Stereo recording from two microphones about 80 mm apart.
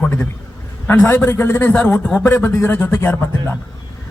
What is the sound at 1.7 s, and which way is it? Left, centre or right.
A man's voice, centre.